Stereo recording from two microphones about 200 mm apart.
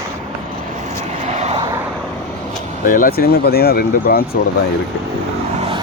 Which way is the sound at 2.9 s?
45° left (ahead or behind).